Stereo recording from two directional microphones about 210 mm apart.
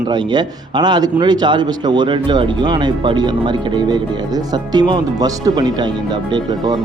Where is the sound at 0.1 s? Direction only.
20° right (ahead or behind).